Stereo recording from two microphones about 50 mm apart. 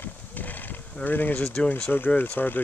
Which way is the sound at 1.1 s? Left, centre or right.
Left.